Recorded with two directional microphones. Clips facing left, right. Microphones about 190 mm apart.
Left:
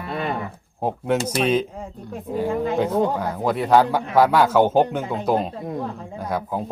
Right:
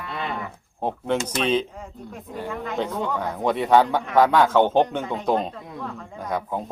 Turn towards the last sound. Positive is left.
turn(degrees=5)  # may be behind; listen again after turning